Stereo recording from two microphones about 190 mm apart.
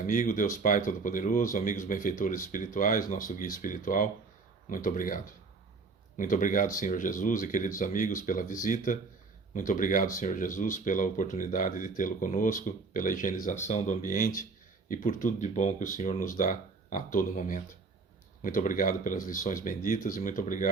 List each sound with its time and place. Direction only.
0.0 s speech: 45° left (ahead or behind)